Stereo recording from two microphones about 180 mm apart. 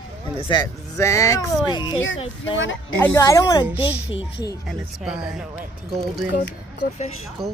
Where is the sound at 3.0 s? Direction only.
15° left (ahead or behind).